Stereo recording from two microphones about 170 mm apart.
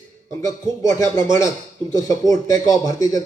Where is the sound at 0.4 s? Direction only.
20° left (ahead or behind).